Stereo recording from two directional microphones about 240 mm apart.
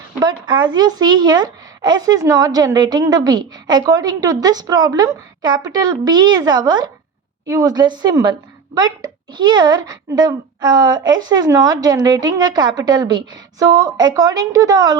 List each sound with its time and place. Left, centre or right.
0.2 s a woman's voice: centre